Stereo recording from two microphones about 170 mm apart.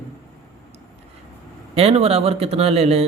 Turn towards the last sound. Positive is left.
turn(degrees=-35)  # may be behind; listen again after turning